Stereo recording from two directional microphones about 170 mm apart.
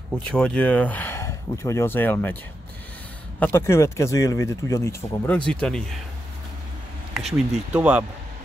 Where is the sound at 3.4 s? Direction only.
15° left (ahead or behind).